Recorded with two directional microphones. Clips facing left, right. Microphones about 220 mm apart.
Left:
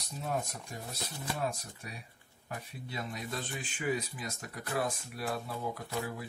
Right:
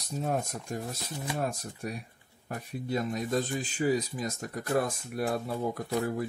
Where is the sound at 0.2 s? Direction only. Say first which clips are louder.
Right 4 dB; 45° right (ahead or behind).